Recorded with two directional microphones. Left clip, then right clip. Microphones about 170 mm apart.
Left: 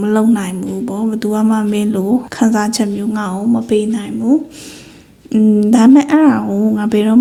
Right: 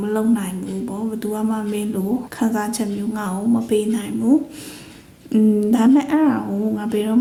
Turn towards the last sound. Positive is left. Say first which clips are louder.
# left 7 dB
turn(degrees=30)  # may be behind; listen again after turning